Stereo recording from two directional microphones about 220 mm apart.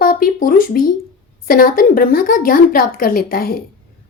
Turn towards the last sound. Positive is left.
turn(degrees=45)  # may be behind; listen again after turning